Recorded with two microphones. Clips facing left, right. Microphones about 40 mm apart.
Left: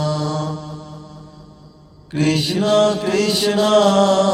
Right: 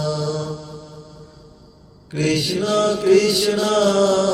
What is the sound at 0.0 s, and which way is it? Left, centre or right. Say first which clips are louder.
Mantra: left 2 dB; left.